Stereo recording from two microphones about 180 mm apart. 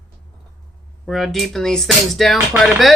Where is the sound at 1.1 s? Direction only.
Centre (ahead or behind).